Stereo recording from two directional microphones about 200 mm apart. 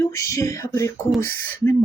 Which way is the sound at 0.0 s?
15° left (ahead or behind).